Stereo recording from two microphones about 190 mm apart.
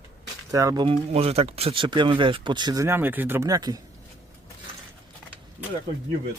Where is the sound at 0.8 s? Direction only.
30° right (ahead or behind).